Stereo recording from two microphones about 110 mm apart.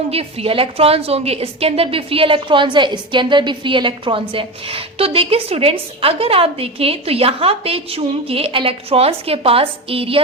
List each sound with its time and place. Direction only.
0.1 s a woman's voice: 65° right (ahead or behind)